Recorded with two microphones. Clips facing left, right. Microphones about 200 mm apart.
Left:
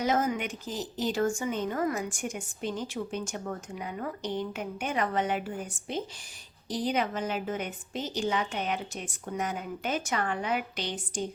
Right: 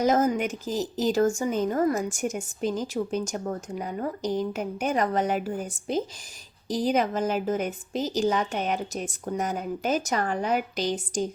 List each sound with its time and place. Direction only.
0.0 s a woman's voice: 40° right (ahead or behind)